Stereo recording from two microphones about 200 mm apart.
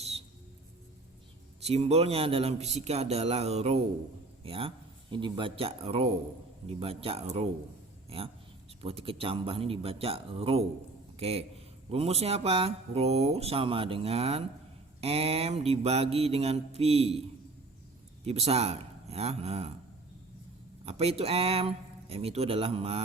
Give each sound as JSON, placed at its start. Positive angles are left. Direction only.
{"t": 1.6, "sound": "a man's voice", "side_deg": -30}
{"t": 18.3, "sound": "speech", "side_deg": -30}
{"t": 20.8, "sound": "a man's voice", "side_deg": -30}